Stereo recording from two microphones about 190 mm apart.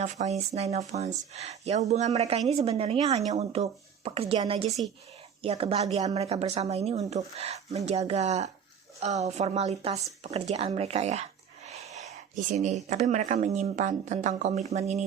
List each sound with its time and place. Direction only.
0.0 s speech: 35° right (ahead or behind)